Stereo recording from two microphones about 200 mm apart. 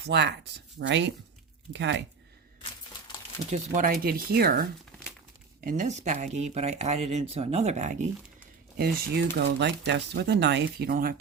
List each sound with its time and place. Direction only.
0.0 s speech: 55° right (ahead or behind)
3.5 s speech: 40° right (ahead or behind)
8.8 s speech: 50° right (ahead or behind)